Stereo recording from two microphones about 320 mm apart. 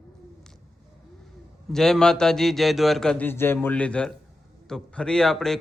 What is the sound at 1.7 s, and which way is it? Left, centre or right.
Speech, centre.